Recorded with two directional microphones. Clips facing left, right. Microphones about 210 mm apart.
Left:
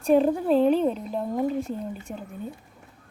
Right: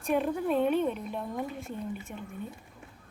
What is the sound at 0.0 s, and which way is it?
Speech, 35° left (ahead or behind).